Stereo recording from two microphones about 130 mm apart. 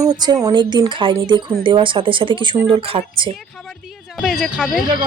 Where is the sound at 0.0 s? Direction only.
30° right (ahead or behind).